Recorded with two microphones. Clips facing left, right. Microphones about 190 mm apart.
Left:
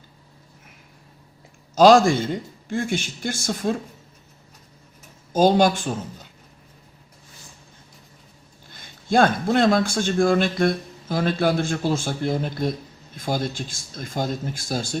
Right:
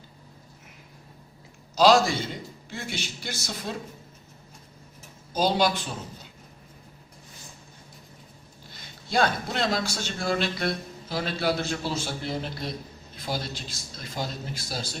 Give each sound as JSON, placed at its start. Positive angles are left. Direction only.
{"t": 1.7, "sound": "a man's voice", "side_deg": 50}
{"t": 5.3, "sound": "a man's voice", "side_deg": 50}
{"t": 8.7, "sound": "a man's voice", "side_deg": 50}